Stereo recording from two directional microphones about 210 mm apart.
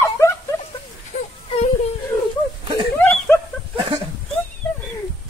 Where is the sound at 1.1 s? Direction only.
35° left (ahead or behind).